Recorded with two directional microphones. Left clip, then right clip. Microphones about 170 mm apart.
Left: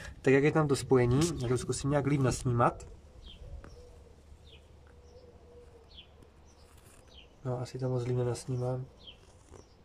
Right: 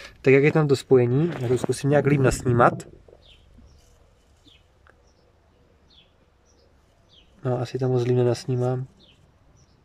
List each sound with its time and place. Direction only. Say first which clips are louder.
0.0 s speech: right 8 dB; 15° right (ahead or behind); by 2.7 s 40° right (ahead or behind)
7.4 s speech: right 11 dB; 60° right (ahead or behind)